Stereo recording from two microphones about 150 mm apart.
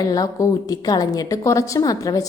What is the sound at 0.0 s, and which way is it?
A woman's voice, 25° left (ahead or behind).